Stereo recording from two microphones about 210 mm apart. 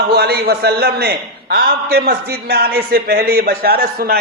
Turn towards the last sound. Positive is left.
turn(degrees=-45)  # may be behind; listen again after turning